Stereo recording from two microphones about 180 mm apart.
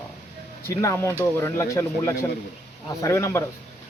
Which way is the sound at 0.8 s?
15° left (ahead or behind).